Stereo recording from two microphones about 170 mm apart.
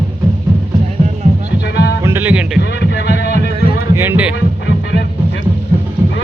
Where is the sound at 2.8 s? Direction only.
80° left.